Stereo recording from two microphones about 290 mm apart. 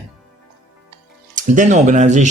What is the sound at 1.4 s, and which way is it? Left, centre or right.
Speech, right.